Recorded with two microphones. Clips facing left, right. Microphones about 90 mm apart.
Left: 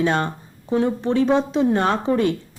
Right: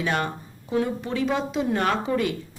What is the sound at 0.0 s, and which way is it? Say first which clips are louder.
A woman's voice: left 5 dB; 30° left (ahead or behind).